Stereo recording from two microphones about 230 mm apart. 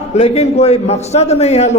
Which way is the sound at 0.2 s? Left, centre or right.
Left.